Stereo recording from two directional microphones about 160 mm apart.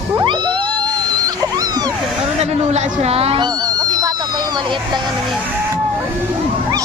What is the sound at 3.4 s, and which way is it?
Cat, 25° right (ahead or behind).